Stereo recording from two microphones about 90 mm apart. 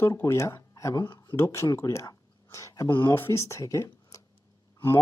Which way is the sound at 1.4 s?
30° left (ahead or behind).